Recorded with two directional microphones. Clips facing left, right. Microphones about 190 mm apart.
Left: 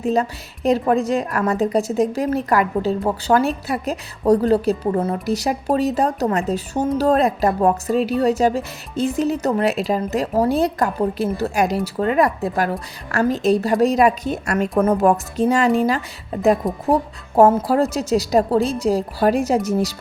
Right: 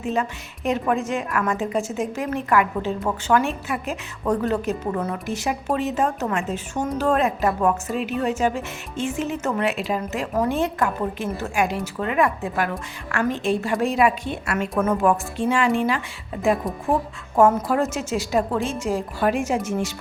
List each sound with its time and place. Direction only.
0.0 s a woman's voice: 35° left (ahead or behind)